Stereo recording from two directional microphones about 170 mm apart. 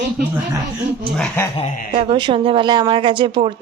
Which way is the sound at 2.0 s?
30° right (ahead or behind).